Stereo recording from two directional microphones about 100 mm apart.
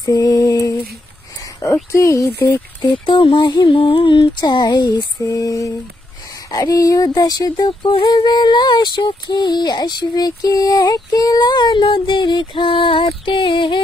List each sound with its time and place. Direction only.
0.0 s lullaby: 40° left (ahead or behind)
1.4 s a sound: 30° left (ahead or behind)
1.9 s speech: 30° left (ahead or behind)
2.8 s speech: 55° left (ahead or behind)
3.6 s speech: 65° left (ahead or behind); by 5.0 s 45° left (ahead or behind)
5.3 s speech: 30° left (ahead or behind); by 13.7 s 60° left (ahead or behind)